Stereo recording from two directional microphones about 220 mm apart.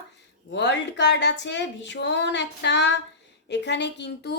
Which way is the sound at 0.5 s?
50° left (ahead or behind).